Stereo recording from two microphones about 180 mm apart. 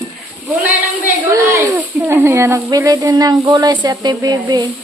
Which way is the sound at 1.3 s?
15° right (ahead or behind).